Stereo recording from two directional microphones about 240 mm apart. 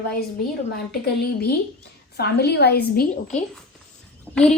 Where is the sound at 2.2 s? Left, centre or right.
Left.